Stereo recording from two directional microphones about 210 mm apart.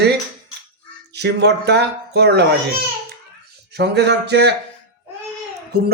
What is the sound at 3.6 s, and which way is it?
Speech, 50° right (ahead or behind).